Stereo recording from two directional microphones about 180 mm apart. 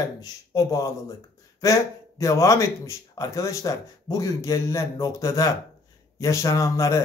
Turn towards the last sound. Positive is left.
turn(degrees=15)  # may be behind; listen again after turning